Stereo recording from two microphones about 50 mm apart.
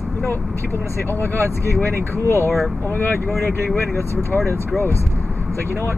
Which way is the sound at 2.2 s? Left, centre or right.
Left.